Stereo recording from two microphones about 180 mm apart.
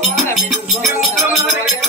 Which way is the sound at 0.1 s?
Centre (ahead or behind).